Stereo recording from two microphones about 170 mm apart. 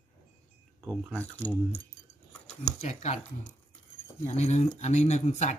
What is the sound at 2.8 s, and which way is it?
Speech, 40° left (ahead or behind).